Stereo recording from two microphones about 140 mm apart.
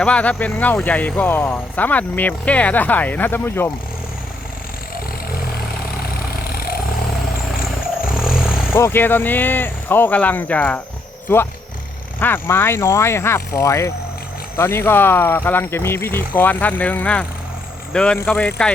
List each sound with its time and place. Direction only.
0.0 s speech: 10° left (ahead or behind)
6.5 s vehicle: 90° left
8.0 s roar: 5° right (ahead or behind)
8.7 s speech: 15° left (ahead or behind)
12.2 s speech: 15° left (ahead or behind)